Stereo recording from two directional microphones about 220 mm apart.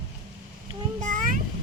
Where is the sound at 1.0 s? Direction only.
35° right (ahead or behind).